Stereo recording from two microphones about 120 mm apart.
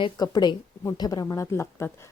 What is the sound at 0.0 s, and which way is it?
A woman's voice, 35° left (ahead or behind).